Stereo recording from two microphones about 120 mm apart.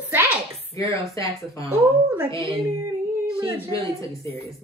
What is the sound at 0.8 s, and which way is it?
Speech, 25° left (ahead or behind).